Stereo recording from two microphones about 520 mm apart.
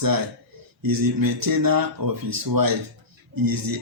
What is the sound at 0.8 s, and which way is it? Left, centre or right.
Speech, right.